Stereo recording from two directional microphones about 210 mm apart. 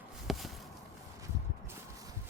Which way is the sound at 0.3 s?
Centre (ahead or behind).